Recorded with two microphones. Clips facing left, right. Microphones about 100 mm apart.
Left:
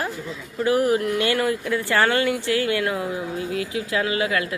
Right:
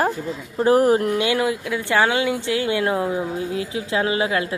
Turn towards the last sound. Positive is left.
turn(degrees=-25)  # may be behind; listen again after turning